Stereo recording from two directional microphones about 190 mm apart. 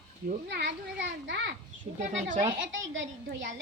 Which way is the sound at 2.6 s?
80° right.